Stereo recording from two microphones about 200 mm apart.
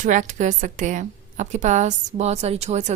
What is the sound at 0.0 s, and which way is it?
A woman's voice, 40° right (ahead or behind).